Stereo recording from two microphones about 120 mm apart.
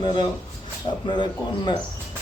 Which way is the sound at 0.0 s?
40° left (ahead or behind).